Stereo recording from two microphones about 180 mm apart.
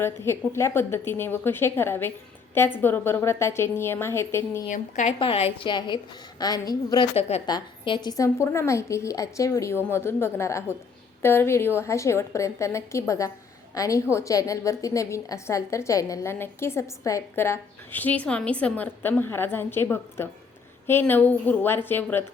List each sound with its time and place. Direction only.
0.0 s a woman's voice: 15° left (ahead or behind)
4.7 s a woman's voice: 40° left (ahead or behind)
5.2 s a woman's voice: 30° left (ahead or behind)
7.2 s a woman's voice: 35° left (ahead or behind)
7.4 s a woman's voice: 25° left (ahead or behind)